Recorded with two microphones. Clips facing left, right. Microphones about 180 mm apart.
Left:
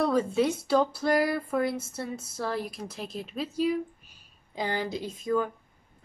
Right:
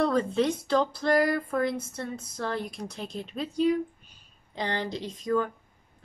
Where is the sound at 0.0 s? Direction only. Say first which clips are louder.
Even; 5° left (ahead or behind).